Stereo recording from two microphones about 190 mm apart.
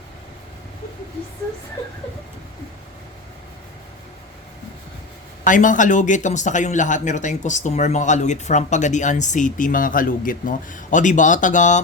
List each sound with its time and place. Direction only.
5.5 s speech: 40° left (ahead or behind)